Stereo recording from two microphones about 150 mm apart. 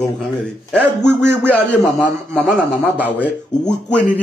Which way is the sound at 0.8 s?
15° right (ahead or behind).